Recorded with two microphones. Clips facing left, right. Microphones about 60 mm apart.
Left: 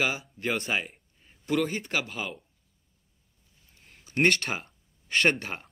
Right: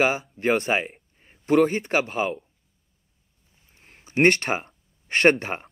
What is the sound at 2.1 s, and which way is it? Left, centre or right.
Speech, right.